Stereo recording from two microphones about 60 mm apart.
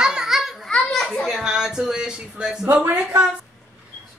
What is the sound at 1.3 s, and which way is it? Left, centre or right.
A woman's voice, centre.